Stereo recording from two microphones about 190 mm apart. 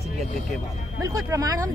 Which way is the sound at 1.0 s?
15° right (ahead or behind).